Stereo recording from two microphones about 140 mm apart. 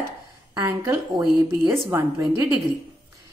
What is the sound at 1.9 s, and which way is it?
Speech, 20° right (ahead or behind).